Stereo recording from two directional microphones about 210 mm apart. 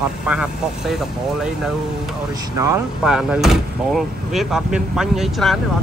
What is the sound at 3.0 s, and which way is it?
Speech, 5° right (ahead or behind).